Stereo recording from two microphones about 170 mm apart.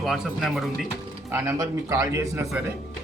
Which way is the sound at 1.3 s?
15° right (ahead or behind).